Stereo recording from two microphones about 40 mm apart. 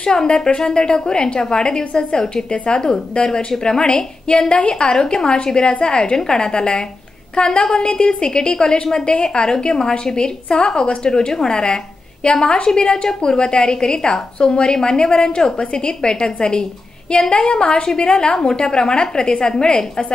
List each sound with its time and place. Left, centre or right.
0.0 s a woman's voice: centre